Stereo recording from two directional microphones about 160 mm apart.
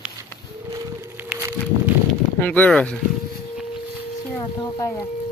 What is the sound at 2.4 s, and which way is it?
Speech, 10° left (ahead or behind).